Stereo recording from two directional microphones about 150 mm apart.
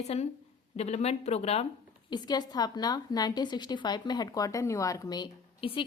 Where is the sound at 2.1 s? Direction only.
30° left (ahead or behind).